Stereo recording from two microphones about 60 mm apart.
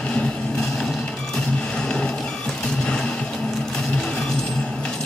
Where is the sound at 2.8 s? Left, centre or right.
Centre.